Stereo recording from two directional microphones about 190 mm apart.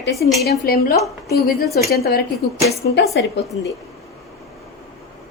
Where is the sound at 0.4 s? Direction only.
50° left (ahead or behind).